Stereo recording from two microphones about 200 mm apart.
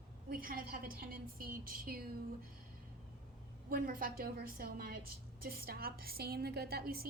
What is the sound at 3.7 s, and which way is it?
A woman's voice, 45° right (ahead or behind).